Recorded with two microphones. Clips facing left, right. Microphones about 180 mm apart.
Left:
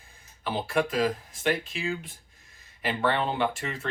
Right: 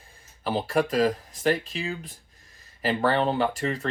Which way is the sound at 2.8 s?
35° right (ahead or behind).